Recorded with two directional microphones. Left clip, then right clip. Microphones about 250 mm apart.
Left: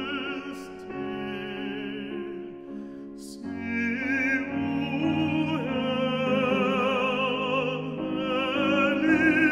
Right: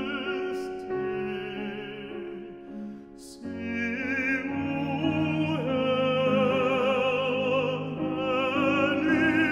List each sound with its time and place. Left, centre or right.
3.6 s music: left